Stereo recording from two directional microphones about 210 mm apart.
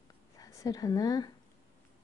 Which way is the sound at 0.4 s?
15° left (ahead or behind).